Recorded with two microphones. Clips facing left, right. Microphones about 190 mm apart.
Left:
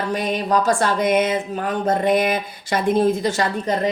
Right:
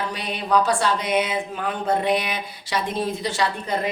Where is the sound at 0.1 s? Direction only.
45° left (ahead or behind).